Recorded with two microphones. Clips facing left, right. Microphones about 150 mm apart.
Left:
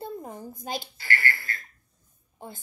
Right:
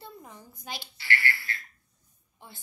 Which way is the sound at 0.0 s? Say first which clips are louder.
Left 10 dB; 45° left (ahead or behind).